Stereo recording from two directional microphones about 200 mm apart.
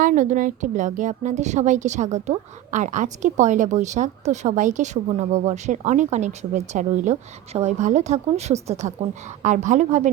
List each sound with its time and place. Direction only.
0.0 s a woman's voice: 40° right (ahead or behind)